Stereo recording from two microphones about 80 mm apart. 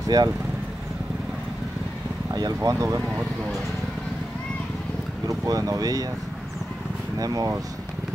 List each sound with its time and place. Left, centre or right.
0.1 s speech: right
2.3 s speech: right
5.3 s speech: right
7.2 s speech: right